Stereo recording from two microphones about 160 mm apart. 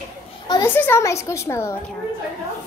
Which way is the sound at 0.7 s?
15° left (ahead or behind).